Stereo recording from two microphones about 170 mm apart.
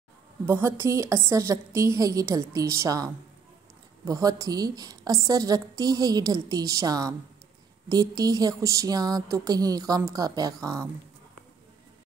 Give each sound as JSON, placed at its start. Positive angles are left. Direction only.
{"t": 0.5, "sound": "a woman's voice", "side_deg": -15}